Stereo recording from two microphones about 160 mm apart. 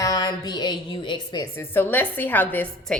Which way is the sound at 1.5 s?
10° left (ahead or behind).